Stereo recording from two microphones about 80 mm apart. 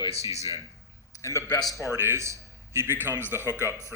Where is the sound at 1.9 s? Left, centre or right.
Right.